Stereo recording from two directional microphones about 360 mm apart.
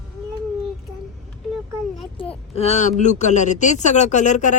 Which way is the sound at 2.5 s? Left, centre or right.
Centre.